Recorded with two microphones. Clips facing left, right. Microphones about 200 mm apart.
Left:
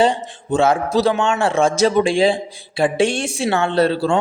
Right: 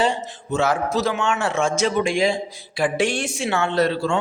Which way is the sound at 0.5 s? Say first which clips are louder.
Left 5 dB; 30° left (ahead or behind).